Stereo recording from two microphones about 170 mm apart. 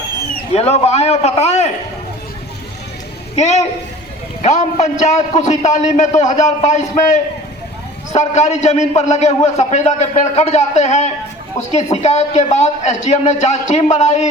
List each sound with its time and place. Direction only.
0.5 s a man's voice: 40° left (ahead or behind)
3.3 s a man's voice: 40° left (ahead or behind)